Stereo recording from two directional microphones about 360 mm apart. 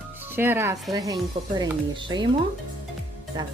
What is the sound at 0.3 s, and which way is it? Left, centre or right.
Speech, centre.